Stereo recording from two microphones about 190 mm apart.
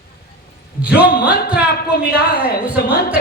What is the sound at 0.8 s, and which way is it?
Speech, 5° right (ahead or behind).